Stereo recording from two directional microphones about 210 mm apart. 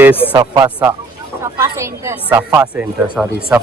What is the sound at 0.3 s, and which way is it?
A woman's voice, 20° right (ahead or behind).